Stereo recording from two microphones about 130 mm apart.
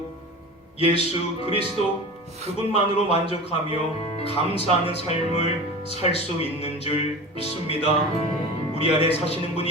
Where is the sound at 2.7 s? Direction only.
50° left (ahead or behind).